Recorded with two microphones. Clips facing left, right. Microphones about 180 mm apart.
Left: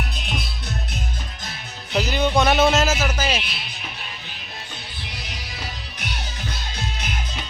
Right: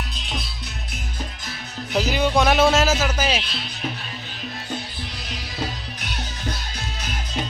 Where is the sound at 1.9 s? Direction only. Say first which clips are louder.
Even; 15° right (ahead or behind).